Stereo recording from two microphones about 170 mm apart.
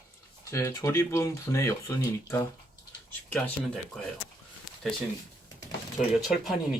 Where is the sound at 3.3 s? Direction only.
5° left (ahead or behind).